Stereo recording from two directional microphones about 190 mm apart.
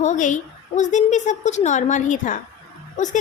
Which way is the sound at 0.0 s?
40° left (ahead or behind).